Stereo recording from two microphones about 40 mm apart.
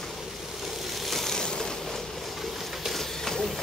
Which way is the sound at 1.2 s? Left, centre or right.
Centre.